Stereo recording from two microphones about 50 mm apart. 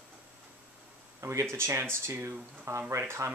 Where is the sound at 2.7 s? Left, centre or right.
Right.